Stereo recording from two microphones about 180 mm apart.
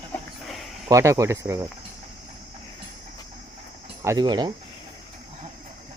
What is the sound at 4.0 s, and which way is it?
Speech, 20° right (ahead or behind).